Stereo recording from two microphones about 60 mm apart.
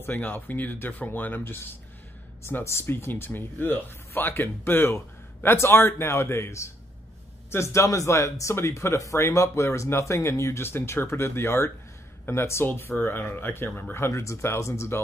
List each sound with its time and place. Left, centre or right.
0.0 s a man's voice: left
10.7 s a man's voice: left
13.7 s speech: left
13.9 s a man's voice: left